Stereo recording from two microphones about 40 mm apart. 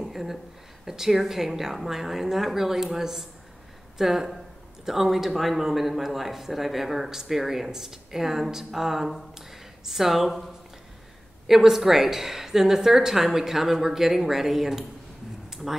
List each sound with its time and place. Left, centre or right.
0.0 s a sound: centre
0.8 s speech: centre
11.4 s speech: centre